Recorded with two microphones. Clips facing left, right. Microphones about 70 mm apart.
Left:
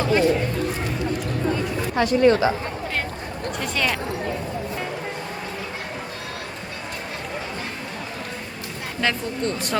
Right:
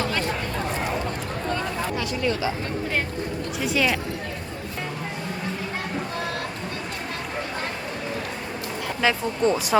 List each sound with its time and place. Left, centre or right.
0.0 s a sound: centre
2.0 s speech: left
3.6 s speech: centre
9.0 s speech: centre